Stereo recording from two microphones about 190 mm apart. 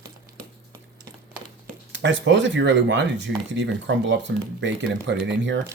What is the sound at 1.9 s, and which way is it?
Speech, 70° right (ahead or behind).